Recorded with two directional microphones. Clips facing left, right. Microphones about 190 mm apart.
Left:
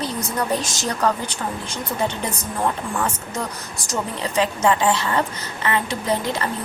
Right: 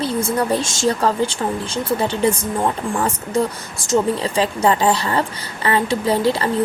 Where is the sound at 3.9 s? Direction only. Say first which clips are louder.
Right 8 dB; 30° right (ahead or behind).